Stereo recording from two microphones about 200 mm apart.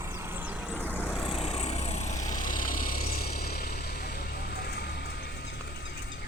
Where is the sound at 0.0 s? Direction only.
15° right (ahead or behind).